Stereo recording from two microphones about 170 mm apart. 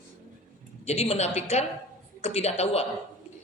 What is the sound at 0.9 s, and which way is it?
A woman's voice, 35° left (ahead or behind).